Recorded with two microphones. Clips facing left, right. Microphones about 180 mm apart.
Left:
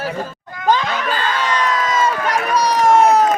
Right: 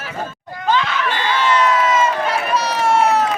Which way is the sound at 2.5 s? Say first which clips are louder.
Left 5 dB; 40° left (ahead or behind).